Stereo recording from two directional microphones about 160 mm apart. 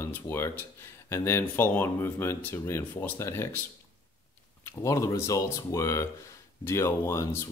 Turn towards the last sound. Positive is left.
turn(degrees=15)  # may be behind; listen again after turning